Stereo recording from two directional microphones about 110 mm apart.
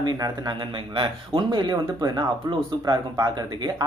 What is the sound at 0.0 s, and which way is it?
Speech, 40° right (ahead or behind).